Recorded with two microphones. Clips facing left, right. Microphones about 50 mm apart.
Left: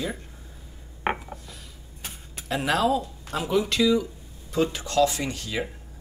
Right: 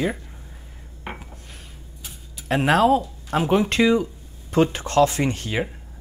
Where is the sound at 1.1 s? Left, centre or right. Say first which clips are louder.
Left 8 dB; left.